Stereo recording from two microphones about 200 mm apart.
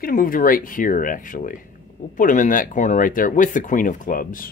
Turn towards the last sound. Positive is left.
turn(degrees=45)  # may be behind; listen again after turning